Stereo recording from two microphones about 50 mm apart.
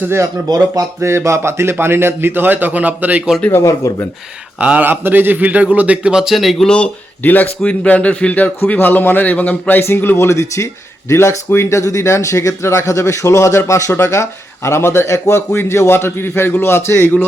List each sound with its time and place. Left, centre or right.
1.0 s speech: right
1.8 s a man's voice: right
3.6 s speech: left
4.5 s speech: right
4.8 s a man's voice: right
6.1 s speech: centre
6.7 s speech: centre
7.2 s a man's voice: left
9.8 s speech: left
10.2 s speech: left
11.1 s speech: left
14.8 s a man's voice: left